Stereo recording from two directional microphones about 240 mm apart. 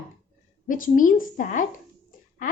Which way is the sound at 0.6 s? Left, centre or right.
Left.